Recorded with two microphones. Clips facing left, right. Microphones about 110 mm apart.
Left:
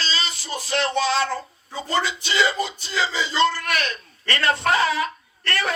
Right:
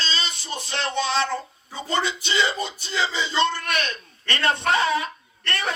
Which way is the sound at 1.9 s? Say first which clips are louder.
Left 1 dB; 25° right (ahead or behind).